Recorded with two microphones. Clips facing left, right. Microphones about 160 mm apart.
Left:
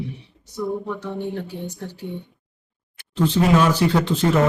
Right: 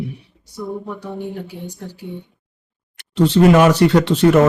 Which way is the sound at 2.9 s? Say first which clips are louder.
Right 5 dB; 75° right (ahead or behind).